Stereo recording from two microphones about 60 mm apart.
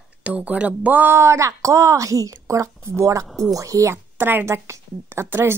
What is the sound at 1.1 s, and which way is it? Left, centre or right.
A woman's voice, right.